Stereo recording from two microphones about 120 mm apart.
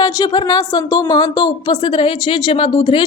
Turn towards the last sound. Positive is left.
turn(degrees=40)  # may be behind; listen again after turning